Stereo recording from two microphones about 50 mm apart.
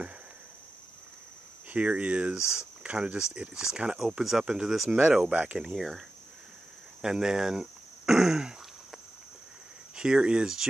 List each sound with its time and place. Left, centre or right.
1.7 s speech: right
2.3 s speech: centre
2.8 s speech: right
4.8 s speech: right
5.6 s speech: centre
7.0 s throat clearing: centre
9.9 s speech: centre